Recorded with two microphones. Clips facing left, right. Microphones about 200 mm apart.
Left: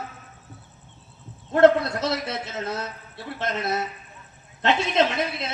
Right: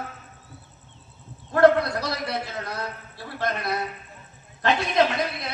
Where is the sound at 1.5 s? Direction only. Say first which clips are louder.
Left 1 dB; 25° left (ahead or behind).